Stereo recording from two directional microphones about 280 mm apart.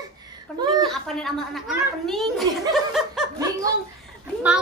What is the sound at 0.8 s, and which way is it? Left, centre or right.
A woman's voice, centre.